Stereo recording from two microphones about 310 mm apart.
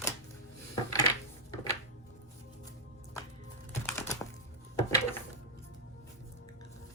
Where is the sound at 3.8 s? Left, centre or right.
Centre.